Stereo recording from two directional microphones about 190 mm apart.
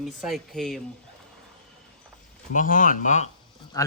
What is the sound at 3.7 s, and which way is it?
Speech, 20° left (ahead or behind).